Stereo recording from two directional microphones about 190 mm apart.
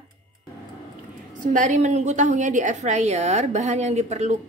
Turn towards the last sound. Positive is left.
turn(degrees=-35)  # may be behind; listen again after turning